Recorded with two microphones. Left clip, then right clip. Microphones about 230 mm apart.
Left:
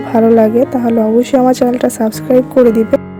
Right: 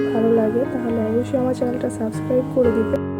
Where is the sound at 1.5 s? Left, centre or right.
Left.